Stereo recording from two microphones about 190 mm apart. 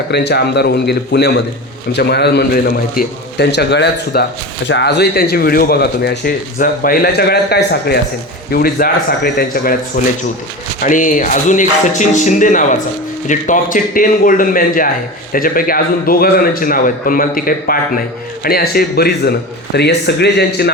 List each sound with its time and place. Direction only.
0.1 s a man's voice: 60° left (ahead or behind)
10.0 s a man's voice: 40° left (ahead or behind); by 20.7 s 60° left (ahead or behind)